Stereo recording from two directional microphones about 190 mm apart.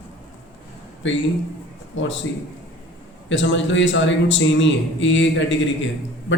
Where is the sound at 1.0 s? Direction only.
80° left.